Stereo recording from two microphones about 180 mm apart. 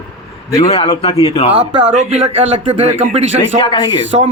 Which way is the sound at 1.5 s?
40° right (ahead or behind).